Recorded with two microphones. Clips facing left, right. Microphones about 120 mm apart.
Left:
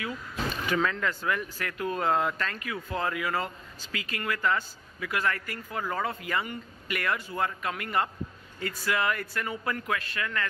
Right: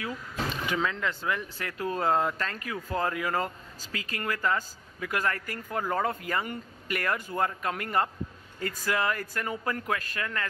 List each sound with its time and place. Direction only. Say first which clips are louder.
0.7 s speech: left 3 dB; 20° right (ahead or behind); by 10.4 s 40° right (ahead or behind)